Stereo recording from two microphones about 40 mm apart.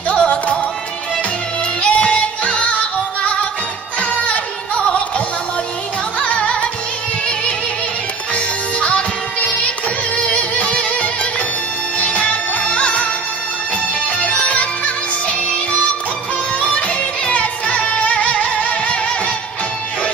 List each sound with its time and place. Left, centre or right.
0.1 s music: left
1.8 s music: left
6.1 s music: left
8.7 s music: left
14.2 s music: left
17.3 s music: left